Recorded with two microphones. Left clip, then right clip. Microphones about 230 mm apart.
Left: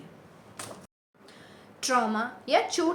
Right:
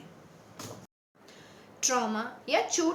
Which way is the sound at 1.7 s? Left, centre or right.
Centre.